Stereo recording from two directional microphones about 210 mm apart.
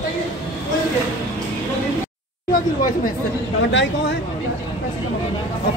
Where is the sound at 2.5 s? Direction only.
40° left (ahead or behind).